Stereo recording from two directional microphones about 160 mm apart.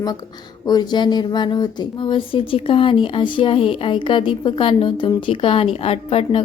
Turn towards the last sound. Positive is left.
turn(degrees=35)  # may be behind; listen again after turning